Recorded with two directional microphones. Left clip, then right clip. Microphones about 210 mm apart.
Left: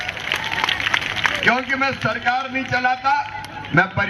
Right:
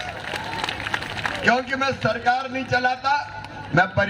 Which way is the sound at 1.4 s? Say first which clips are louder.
Right 1 dB; 50° right (ahead or behind).